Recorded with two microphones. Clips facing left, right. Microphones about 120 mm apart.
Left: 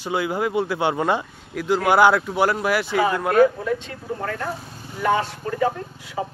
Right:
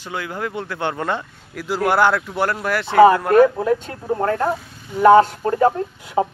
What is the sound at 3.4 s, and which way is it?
A man's voice, 60° right (ahead or behind).